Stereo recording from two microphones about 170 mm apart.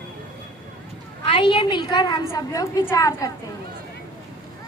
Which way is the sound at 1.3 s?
30° left (ahead or behind).